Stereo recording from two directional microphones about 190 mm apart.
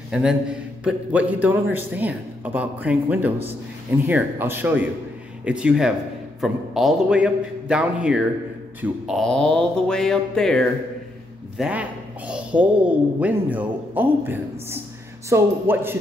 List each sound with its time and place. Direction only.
0.1 s a woman's voice: 5° right (ahead or behind)